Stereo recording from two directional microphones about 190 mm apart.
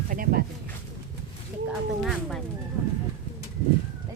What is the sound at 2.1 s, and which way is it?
Speech, centre (ahead or behind).